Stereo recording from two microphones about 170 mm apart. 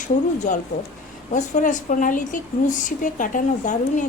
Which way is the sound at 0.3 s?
50° left (ahead or behind).